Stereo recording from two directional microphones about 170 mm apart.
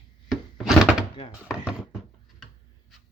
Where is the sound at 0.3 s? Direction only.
Centre (ahead or behind).